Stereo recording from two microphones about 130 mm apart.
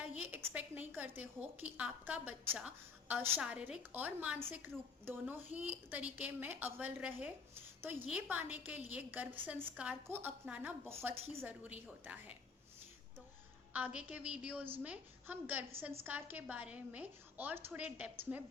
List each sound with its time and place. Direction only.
0.0 s a sound: 10° right (ahead or behind)
0.5 s a woman's voice: 15° right (ahead or behind)
13.7 s a woman's voice: 10° right (ahead or behind)